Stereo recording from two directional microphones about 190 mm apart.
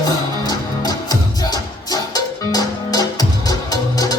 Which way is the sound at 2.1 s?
20° left (ahead or behind).